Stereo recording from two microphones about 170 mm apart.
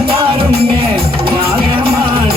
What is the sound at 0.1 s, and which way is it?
Music, 30° right (ahead or behind).